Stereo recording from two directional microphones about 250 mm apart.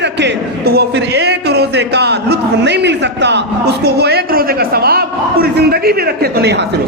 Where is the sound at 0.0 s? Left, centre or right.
Right.